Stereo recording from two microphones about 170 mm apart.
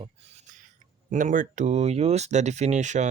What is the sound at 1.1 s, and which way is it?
Speech, 50° right (ahead or behind).